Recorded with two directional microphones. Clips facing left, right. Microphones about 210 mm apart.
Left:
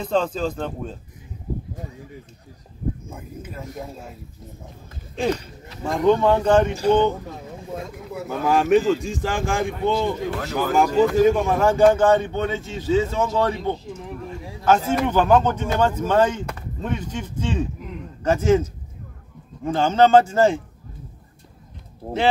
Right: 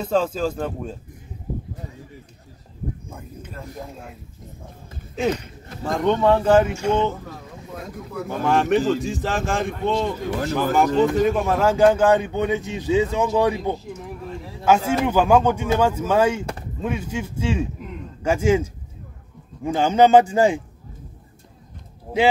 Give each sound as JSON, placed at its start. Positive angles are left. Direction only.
{"t": 0.0, "sound": "speech", "side_deg": -5}
{"t": 3.1, "sound": "speech", "side_deg": 5}
{"t": 5.9, "sound": "speech", "side_deg": 0}
{"t": 6.7, "sound": "speech", "side_deg": 35}
{"t": 7.2, "sound": "vehicle", "side_deg": 20}
{"t": 8.5, "sound": "a man's voice", "side_deg": 0}